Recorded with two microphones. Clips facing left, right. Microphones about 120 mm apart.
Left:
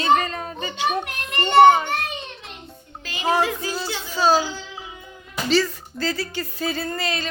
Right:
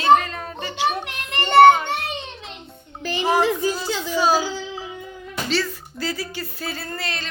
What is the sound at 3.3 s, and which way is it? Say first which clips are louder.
Speech: right 4 dB; 10° right (ahead or behind).